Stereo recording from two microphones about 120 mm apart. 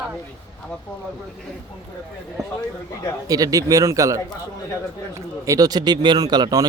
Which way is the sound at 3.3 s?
30° right (ahead or behind).